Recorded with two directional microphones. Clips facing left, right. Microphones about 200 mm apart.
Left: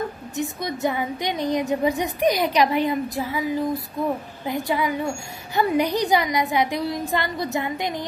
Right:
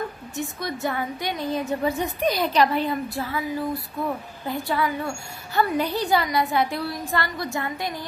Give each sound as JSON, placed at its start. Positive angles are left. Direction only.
{"t": 0.4, "sound": "a woman's voice", "side_deg": 20}